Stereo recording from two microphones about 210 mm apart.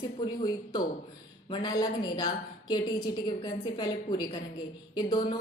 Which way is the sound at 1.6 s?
20° left (ahead or behind).